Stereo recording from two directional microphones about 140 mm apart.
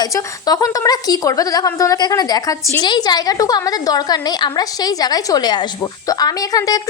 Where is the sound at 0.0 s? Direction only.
25° left (ahead or behind).